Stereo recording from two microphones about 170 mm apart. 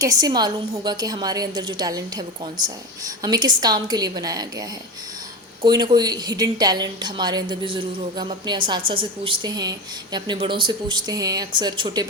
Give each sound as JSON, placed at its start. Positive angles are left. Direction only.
{"t": 0.0, "sound": "a woman's voice", "side_deg": -20}
{"t": 5.6, "sound": "a woman's voice", "side_deg": -25}